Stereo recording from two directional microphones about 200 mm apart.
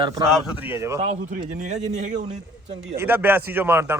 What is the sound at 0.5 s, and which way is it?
Speech, 10° right (ahead or behind).